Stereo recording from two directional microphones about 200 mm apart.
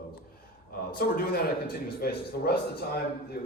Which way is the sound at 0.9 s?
50° left (ahead or behind).